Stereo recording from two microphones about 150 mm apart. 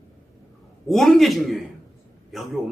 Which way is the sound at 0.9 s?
Centre (ahead or behind).